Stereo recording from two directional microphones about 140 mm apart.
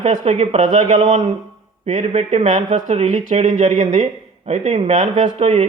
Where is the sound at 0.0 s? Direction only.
60° right (ahead or behind).